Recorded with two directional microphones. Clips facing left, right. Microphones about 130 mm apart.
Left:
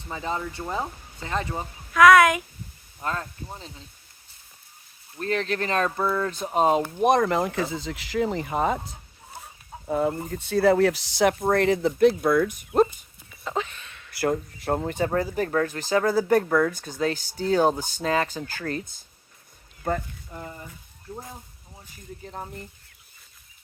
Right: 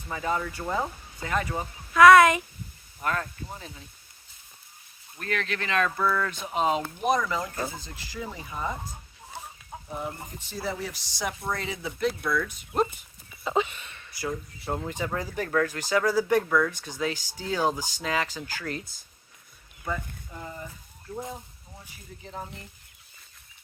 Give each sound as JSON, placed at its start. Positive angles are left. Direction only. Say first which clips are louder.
{"t": 0.1, "sound": "speech", "louder": "right 1 dB", "side_deg": 25}
{"t": 1.9, "sound": "speech", "louder": "even", "side_deg": 0}
{"t": 3.0, "sound": "speech", "louder": "right 1 dB", "side_deg": 25}
{"t": 5.2, "sound": "speech", "louder": "left 5 dB", "side_deg": 35}
{"t": 6.1, "sound": "speech", "louder": "left 2 dB", "side_deg": 25}
{"t": 6.4, "sound": "speech", "louder": "left 7 dB", "side_deg": 45}
{"t": 7.0, "sound": "speech", "louder": "left 7 dB", "side_deg": 55}
{"t": 9.8, "sound": "speech", "louder": "left 11 dB", "side_deg": 85}
{"t": 13.4, "sound": "a sound", "louder": "right 3 dB", "side_deg": -5}
{"t": 14.2, "sound": "speech", "louder": "left 8 dB", "side_deg": 65}
{"t": 15.0, "sound": "speech", "louder": "left 8 dB", "side_deg": 45}
{"t": 15.4, "sound": "speech", "louder": "left 2 dB", "side_deg": 30}
{"t": 18.0, "sound": "speech", "louder": "left 5 dB", "side_deg": 35}